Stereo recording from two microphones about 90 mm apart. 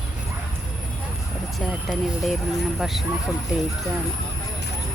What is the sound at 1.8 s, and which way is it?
Speech, centre (ahead or behind).